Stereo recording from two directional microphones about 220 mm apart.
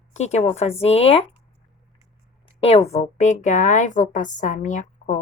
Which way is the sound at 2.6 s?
30° left (ahead or behind).